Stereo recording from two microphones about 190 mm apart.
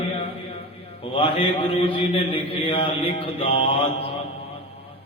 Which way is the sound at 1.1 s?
30° left (ahead or behind).